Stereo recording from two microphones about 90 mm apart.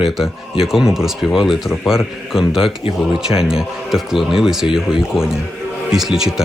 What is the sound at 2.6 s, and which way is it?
Speech, 80° left.